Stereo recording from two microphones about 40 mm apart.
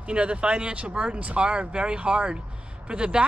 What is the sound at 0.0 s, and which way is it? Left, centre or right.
Speech, right.